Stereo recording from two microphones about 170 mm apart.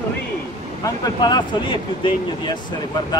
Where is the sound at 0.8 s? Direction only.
20° left (ahead or behind).